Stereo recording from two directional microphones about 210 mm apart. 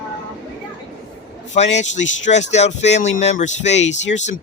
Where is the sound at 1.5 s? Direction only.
35° left (ahead or behind).